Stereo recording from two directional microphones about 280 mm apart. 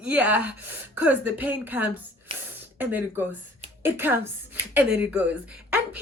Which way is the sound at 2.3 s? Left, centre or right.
Centre.